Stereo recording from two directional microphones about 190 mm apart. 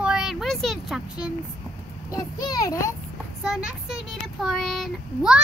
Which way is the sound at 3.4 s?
5° right (ahead or behind).